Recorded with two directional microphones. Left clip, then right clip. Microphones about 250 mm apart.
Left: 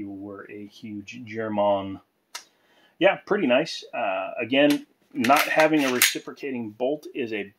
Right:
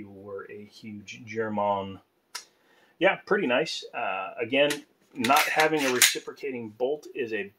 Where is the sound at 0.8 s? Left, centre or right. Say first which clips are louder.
Left 4 dB; left.